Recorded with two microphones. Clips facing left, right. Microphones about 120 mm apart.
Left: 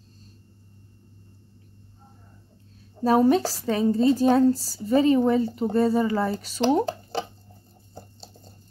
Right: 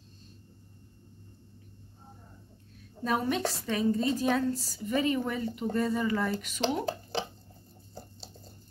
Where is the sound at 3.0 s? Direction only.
35° left (ahead or behind).